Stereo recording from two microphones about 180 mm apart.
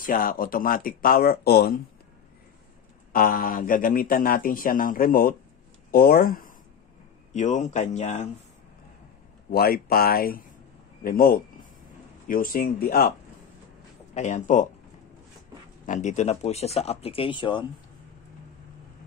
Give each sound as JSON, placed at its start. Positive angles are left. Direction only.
{"t": 0.0, "sound": "a man's voice", "side_deg": 50}
{"t": 3.1, "sound": "a man's voice", "side_deg": 55}
{"t": 7.3, "sound": "speech", "side_deg": 40}
{"t": 9.5, "sound": "a man's voice", "side_deg": 60}
{"t": 14.1, "sound": "a man's voice", "side_deg": 40}
{"t": 15.8, "sound": "speech", "side_deg": 45}